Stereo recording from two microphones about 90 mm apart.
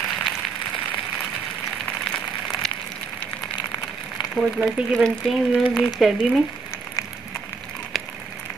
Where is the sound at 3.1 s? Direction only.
20° left (ahead or behind).